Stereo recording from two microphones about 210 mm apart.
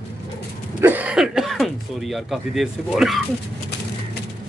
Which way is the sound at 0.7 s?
10° right (ahead or behind).